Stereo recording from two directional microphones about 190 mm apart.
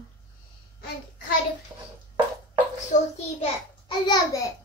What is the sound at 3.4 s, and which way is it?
Speech, 25° left (ahead or behind).